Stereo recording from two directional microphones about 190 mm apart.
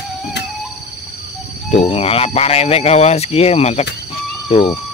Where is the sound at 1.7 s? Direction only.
30° left (ahead or behind).